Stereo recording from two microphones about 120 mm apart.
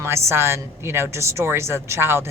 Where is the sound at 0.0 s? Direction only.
20° right (ahead or behind).